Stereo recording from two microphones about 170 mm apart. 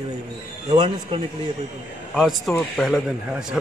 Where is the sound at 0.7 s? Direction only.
35° right (ahead or behind).